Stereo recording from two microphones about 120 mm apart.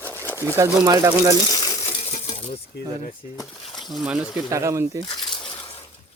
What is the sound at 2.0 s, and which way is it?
Coin, 75° left (ahead or behind).